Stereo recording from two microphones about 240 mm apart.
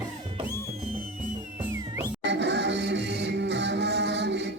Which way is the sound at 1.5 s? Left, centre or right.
Centre.